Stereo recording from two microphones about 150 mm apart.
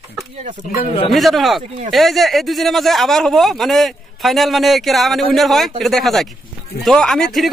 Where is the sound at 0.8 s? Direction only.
40° left (ahead or behind).